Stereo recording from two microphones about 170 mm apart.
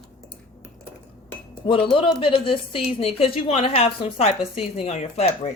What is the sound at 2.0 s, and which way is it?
Speech, 30° left (ahead or behind).